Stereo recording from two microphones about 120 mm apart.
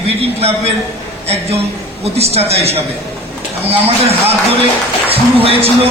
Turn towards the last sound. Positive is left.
turn(degrees=-50)  # may be behind; listen again after turning